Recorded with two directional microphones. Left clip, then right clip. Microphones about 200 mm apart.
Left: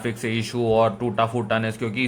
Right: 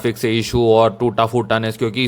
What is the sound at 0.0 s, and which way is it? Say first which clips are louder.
A man's voice: right 8 dB; 30° right (ahead or behind).